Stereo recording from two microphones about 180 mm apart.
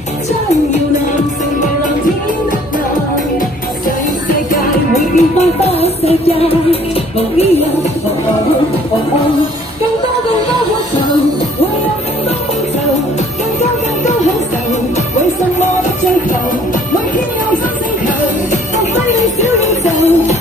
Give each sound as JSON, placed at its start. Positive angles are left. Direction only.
{"t": 5.1, "sound": "music", "side_deg": 35}
{"t": 19.2, "sound": "music", "side_deg": 40}